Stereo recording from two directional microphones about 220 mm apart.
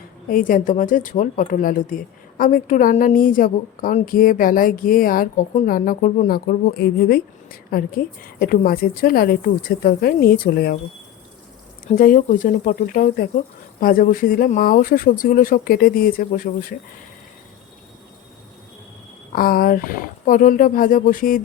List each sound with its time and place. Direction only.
0.3 s a woman's voice: 40° left (ahead or behind)
11.9 s a woman's voice: 40° left (ahead or behind)
19.3 s a woman's voice: 40° left (ahead or behind)